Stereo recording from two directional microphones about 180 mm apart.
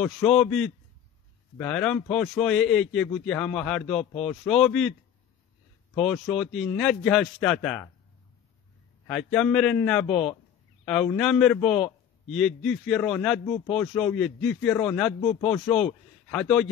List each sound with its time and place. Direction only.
0.0 s a man's voice: centre (ahead or behind)
5.9 s a man's voice: centre (ahead or behind)
9.0 s a man's voice: 5° left (ahead or behind)
10.0 s speech: 35° left (ahead or behind)
11.1 s a man's voice: 5° left (ahead or behind)
15.1 s speech: 35° left (ahead or behind)
15.7 s a man's voice: 5° left (ahead or behind)